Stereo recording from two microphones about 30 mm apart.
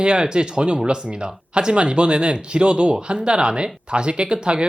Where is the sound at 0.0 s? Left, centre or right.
Right.